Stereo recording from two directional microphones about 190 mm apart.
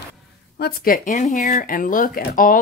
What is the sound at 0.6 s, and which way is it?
Speech, 50° left (ahead or behind).